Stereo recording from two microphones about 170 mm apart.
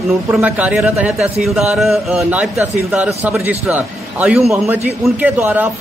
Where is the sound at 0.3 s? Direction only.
10° right (ahead or behind).